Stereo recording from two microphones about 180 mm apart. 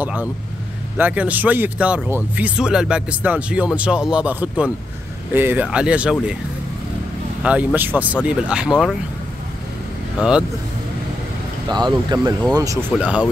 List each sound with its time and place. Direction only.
0.0 s speech: 10° right (ahead or behind)
7.4 s speech: 10° right (ahead or behind)
10.1 s speech: 5° right (ahead or behind)
11.7 s speech: 25° right (ahead or behind)
12.9 s speech: 5° right (ahead or behind)